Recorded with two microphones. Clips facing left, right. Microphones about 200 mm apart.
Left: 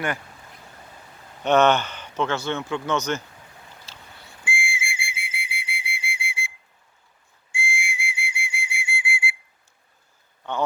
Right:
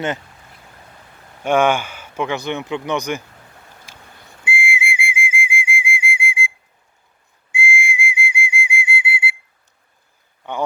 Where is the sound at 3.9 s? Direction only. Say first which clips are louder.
Right 2 dB; 15° right (ahead or behind).